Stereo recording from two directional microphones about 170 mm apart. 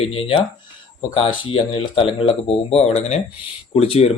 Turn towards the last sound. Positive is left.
turn(degrees=35)  # may be behind; listen again after turning